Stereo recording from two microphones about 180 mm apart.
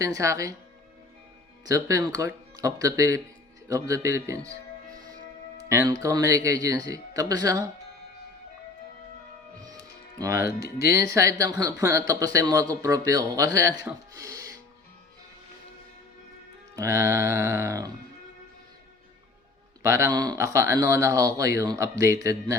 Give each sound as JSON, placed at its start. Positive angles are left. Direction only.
{"t": 0.0, "sound": "speech", "side_deg": -20}
{"t": 1.6, "sound": "speech", "side_deg": -20}
{"t": 5.5, "sound": "speech", "side_deg": -15}
{"t": 10.2, "sound": "speech", "side_deg": -15}
{"t": 16.7, "sound": "speech", "side_deg": -15}
{"t": 19.8, "sound": "speech", "side_deg": -15}